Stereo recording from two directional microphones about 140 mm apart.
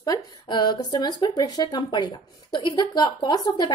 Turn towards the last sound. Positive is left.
turn(degrees=30)  # may be behind; listen again after turning